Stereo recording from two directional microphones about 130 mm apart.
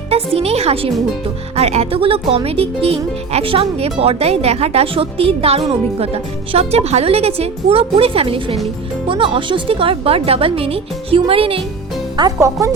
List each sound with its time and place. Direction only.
0.1 s speech: 50° right (ahead or behind)
12.1 s speech: 30° right (ahead or behind)